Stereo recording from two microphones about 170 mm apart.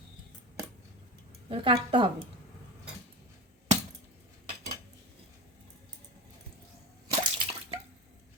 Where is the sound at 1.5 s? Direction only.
30° right (ahead or behind).